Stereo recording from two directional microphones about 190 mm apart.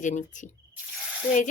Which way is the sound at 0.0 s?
40° left (ahead or behind).